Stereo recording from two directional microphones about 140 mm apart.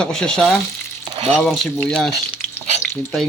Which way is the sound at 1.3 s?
Centre (ahead or behind).